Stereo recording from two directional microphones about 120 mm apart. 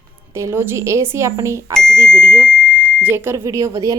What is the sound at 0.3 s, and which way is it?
Speech, 20° right (ahead or behind).